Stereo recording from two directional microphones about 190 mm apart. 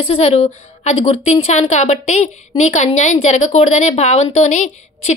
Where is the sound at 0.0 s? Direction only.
35° left (ahead or behind).